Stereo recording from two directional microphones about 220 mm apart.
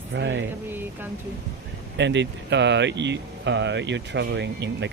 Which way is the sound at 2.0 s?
55° right (ahead or behind).